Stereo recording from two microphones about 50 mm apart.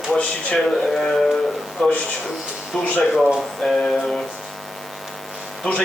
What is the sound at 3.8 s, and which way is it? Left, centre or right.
Speech, centre.